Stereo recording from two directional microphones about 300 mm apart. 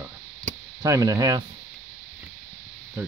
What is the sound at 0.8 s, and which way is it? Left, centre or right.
Speech, centre.